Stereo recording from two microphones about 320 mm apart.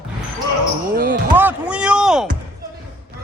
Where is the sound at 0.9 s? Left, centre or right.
Right.